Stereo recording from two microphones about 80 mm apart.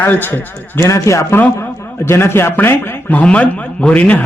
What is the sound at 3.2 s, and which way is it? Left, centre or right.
A man's voice, centre.